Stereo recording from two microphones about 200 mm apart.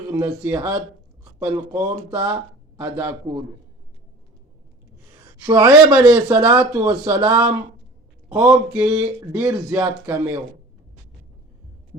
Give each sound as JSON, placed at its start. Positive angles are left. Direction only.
{"t": 0.1, "sound": "speech", "side_deg": -15}
{"t": 1.2, "sound": "a sound", "side_deg": -10}
{"t": 2.0, "sound": "speech", "side_deg": -10}
{"t": 5.5, "sound": "speech", "side_deg": -15}